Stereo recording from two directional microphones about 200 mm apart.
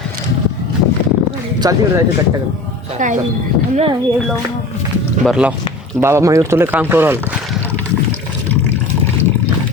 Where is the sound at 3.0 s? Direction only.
40° right (ahead or behind).